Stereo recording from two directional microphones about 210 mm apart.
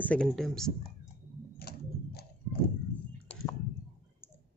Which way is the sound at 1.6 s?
50° left (ahead or behind).